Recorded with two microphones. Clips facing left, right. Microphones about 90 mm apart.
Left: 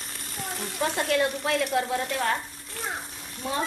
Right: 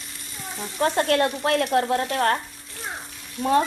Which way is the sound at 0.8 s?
55° right (ahead or behind).